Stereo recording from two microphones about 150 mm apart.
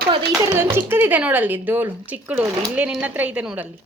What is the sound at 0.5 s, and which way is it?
Speech, 15° right (ahead or behind).